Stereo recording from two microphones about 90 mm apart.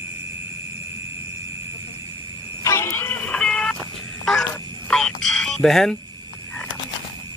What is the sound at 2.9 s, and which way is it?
Music, 20° left (ahead or behind).